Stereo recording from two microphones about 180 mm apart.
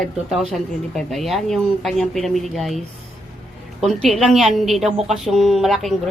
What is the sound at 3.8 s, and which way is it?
A woman's voice, centre (ahead or behind).